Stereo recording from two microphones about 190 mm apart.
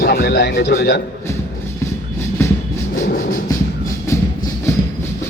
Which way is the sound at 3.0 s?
40° left (ahead or behind).